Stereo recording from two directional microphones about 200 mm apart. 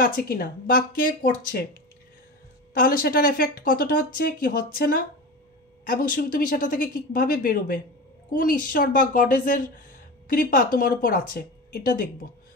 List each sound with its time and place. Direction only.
0.0 s a woman's voice: 45° left (ahead or behind)